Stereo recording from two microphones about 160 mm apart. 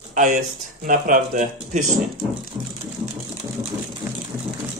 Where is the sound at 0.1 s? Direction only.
50° right (ahead or behind).